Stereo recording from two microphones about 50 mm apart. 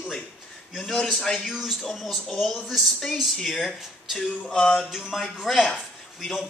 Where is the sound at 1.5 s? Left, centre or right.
Centre.